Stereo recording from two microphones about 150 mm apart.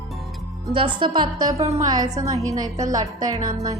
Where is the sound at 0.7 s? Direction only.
30° right (ahead or behind).